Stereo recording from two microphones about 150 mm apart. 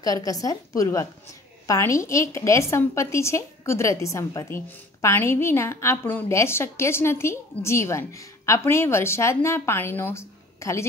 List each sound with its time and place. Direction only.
0.0 s a woman's voice: 25° left (ahead or behind)